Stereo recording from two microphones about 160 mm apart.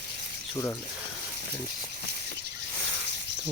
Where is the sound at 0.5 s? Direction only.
15° left (ahead or behind).